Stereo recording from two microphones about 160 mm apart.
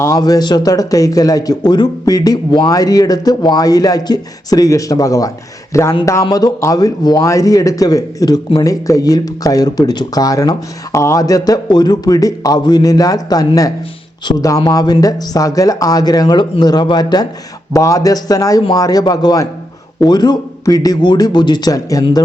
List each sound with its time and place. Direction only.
0.0 s a man's voice: 20° left (ahead or behind)